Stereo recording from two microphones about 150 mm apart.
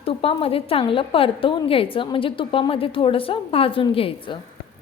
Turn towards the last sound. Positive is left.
turn(degrees=35)  # may be behind; listen again after turning